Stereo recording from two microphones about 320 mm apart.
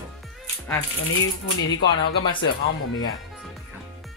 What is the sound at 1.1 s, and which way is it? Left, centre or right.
Speech, left.